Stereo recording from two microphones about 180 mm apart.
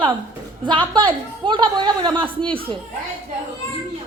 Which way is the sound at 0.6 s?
25° right (ahead or behind).